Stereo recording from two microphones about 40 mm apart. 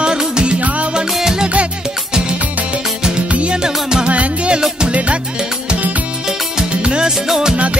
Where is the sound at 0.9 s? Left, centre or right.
Centre.